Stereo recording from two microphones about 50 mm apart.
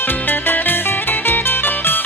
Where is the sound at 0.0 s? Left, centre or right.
Left.